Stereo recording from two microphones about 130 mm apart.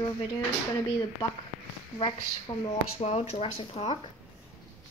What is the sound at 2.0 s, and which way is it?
Speech, 45° left (ahead or behind).